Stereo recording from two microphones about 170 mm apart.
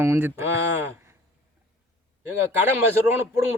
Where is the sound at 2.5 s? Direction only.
15° right (ahead or behind).